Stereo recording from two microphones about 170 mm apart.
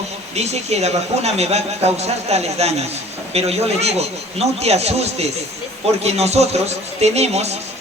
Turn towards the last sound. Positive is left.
turn(degrees=-40)  # may be behind; listen again after turning